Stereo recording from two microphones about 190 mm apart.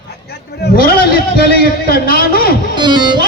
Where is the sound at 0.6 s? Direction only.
55° left (ahead or behind).